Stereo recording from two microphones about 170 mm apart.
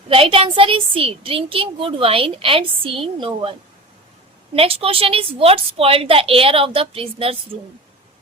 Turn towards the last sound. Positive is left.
turn(degrees=-35)  # may be behind; listen again after turning